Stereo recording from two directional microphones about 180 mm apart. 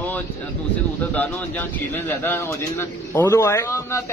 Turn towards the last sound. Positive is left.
turn(degrees=15)  # may be behind; listen again after turning